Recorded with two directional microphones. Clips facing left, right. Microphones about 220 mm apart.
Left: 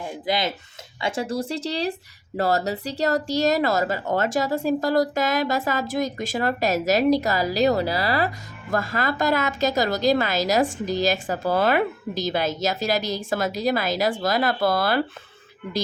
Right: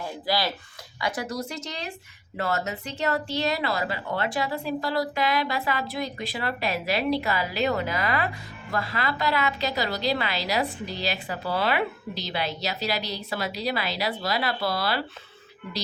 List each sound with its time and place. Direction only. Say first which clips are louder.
0.3 s a woman's voice: left 2 dB; 20° left (ahead or behind); by 15.0 s 50° left (ahead or behind)